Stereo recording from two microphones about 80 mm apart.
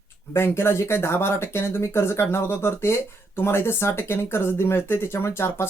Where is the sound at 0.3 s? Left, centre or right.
Left.